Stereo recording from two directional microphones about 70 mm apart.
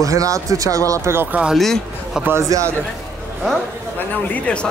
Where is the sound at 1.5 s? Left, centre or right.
Centre.